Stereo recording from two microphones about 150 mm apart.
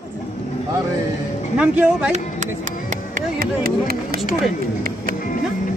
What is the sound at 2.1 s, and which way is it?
Music, 50° right (ahead or behind).